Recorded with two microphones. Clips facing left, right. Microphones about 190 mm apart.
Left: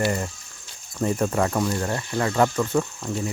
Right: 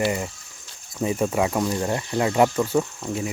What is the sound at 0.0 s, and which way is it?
Speech, 5° right (ahead or behind).